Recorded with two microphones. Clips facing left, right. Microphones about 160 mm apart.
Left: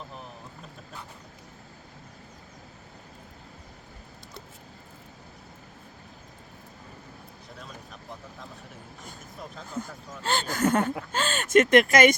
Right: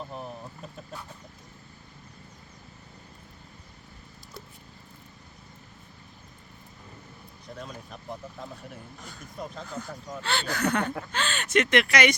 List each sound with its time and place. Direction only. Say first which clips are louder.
10.2 s speech: left 3 dB; 45° left (ahead or behind)